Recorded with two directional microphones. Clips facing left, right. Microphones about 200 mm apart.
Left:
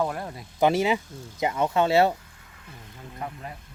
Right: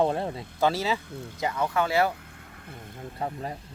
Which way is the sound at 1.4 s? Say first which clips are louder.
Left 4 dB; 20° left (ahead or behind).